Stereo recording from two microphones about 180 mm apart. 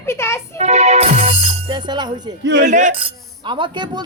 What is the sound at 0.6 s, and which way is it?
Speech, 40° right (ahead or behind).